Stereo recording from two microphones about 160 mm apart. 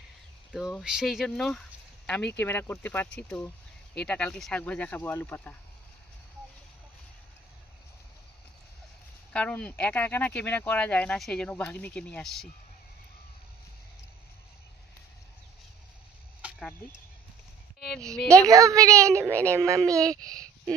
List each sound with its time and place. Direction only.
0.5 s speech: centre (ahead or behind)
9.3 s speech: 5° left (ahead or behind)
16.4 s a sound: 10° right (ahead or behind)
17.7 s a woman's voice: 5° left (ahead or behind)
18.4 s a child's voice: 20° right (ahead or behind)
20.2 s speech: 5° left (ahead or behind)